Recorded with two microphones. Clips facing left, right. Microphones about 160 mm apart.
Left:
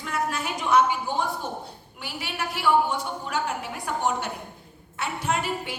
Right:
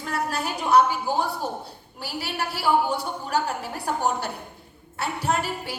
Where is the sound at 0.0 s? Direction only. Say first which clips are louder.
Right 1 dB; 35° right (ahead or behind).